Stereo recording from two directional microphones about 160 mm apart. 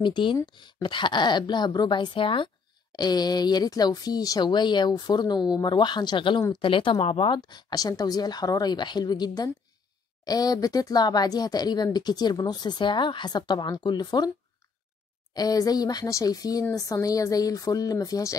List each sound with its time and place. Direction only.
0.0 s speech: 30° left (ahead or behind)
15.3 s speech: 25° left (ahead or behind)